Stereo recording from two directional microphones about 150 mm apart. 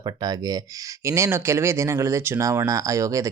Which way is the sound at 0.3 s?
25° right (ahead or behind).